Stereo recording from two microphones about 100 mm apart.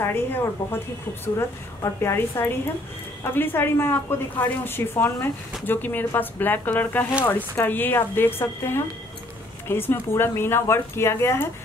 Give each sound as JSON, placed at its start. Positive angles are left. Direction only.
{"t": 0.0, "sound": "a woman's voice", "side_deg": 20}
{"t": 1.8, "sound": "a woman's voice", "side_deg": 25}